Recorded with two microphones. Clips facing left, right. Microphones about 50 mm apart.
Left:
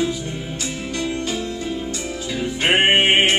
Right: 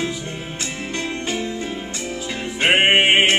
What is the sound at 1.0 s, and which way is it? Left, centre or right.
Music, right.